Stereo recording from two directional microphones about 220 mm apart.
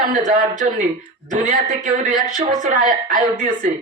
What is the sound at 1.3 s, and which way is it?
A woman's voice, 35° right (ahead or behind).